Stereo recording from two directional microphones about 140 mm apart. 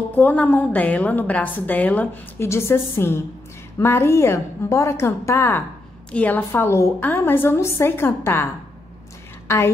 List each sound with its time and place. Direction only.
0.1 s a woman's voice: 10° left (ahead or behind)